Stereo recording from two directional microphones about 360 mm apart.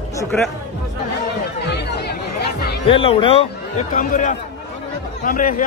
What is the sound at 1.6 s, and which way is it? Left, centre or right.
Chatter, left.